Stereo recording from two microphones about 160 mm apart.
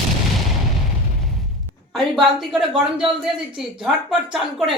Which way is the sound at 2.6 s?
5° right (ahead or behind).